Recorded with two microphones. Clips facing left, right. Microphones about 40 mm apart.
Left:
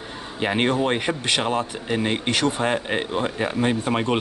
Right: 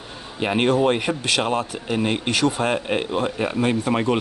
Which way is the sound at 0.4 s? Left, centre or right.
Centre.